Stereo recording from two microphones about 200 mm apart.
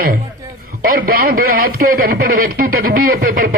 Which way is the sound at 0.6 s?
45° right (ahead or behind).